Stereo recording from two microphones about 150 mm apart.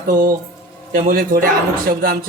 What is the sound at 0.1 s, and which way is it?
A man's voice, 70° right (ahead or behind).